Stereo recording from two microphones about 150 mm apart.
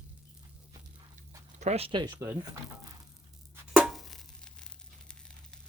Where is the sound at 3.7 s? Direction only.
Centre (ahead or behind).